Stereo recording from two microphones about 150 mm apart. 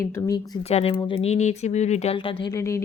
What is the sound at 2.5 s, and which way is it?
Speech, 20° left (ahead or behind).